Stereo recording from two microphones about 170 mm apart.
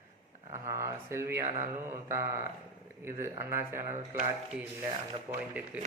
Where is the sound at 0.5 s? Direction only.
15° right (ahead or behind).